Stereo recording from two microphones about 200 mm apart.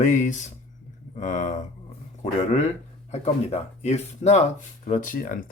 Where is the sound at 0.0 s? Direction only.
35° left (ahead or behind).